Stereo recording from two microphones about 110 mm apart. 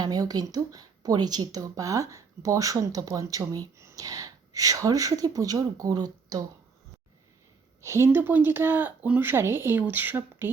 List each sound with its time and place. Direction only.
0.0 s speech: 35° right (ahead or behind)
7.8 s speech: 25° right (ahead or behind)